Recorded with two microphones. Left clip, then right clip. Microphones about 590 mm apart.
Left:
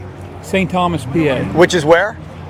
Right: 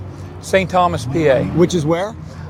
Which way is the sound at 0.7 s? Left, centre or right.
Right.